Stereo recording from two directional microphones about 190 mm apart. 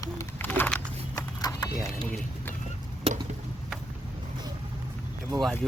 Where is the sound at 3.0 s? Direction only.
30° right (ahead or behind).